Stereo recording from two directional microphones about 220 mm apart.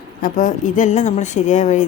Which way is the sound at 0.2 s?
35° left (ahead or behind).